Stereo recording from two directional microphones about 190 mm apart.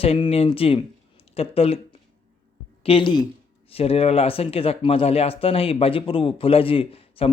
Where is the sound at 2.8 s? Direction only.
25° left (ahead or behind).